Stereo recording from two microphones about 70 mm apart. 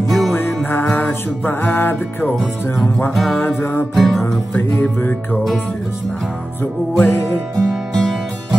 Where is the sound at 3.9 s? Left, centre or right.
Centre.